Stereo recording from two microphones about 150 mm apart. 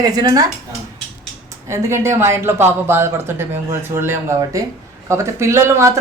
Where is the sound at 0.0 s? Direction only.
25° right (ahead or behind).